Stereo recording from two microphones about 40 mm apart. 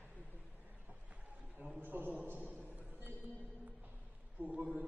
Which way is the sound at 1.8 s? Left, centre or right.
Right.